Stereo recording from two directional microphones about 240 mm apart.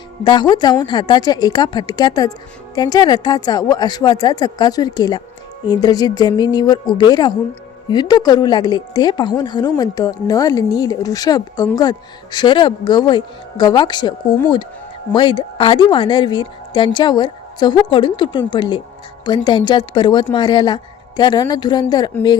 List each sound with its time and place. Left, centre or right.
0.3 s a woman's voice: centre